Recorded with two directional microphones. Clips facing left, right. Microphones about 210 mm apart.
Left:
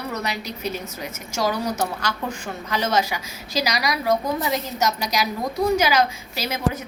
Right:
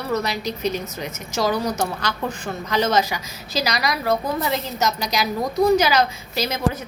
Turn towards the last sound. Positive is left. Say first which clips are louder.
# right 3 dB
turn(degrees=10)  # may be behind; listen again after turning